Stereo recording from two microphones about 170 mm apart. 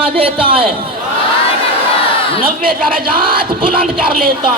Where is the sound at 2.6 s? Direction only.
60° right (ahead or behind).